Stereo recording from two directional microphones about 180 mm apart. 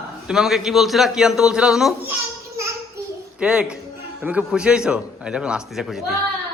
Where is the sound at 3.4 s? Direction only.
5° right (ahead or behind).